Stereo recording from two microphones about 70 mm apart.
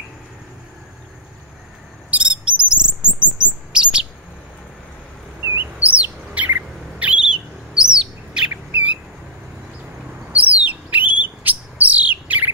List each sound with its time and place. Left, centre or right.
2.0 s cricket: centre
3.4 s bird: centre
5.4 s bird: right
5.8 s bird: right
10.3 s bird: right